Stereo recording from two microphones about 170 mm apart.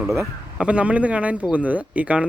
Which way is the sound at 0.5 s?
5° right (ahead or behind).